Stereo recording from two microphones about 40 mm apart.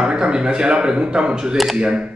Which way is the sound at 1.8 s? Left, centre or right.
Right.